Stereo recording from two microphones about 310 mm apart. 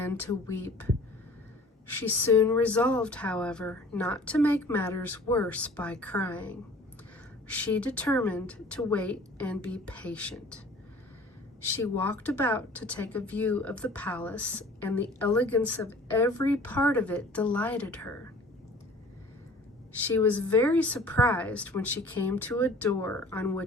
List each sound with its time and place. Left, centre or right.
0.0 s a woman's voice: centre
11.6 s speech: centre
20.1 s speech: centre